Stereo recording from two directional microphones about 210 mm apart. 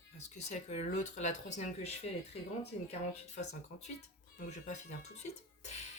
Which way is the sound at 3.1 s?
35° left (ahead or behind).